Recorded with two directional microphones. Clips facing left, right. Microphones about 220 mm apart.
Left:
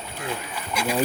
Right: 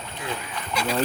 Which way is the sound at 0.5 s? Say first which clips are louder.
Even; 10° left (ahead or behind).